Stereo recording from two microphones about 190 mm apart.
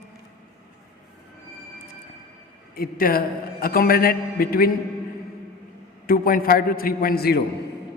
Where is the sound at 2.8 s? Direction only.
50° left (ahead or behind).